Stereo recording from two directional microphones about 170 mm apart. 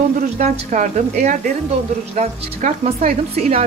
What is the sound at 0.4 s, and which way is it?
Speech, 45° right (ahead or behind).